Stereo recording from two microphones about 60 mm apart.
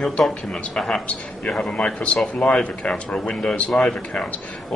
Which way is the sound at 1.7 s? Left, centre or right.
Left.